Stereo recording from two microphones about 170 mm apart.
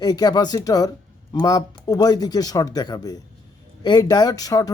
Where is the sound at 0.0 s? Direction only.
25° left (ahead or behind).